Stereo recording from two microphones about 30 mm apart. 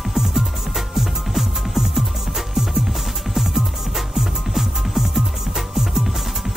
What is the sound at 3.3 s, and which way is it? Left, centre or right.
Music, centre.